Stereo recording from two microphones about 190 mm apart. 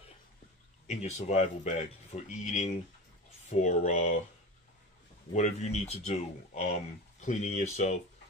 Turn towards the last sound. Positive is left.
turn(degrees=35)  # may be behind; listen again after turning